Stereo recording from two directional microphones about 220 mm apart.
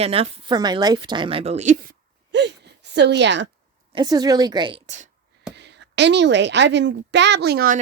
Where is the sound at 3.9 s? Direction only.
15° right (ahead or behind).